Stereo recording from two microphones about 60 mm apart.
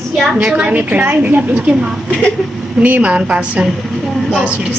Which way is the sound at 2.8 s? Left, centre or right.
Right.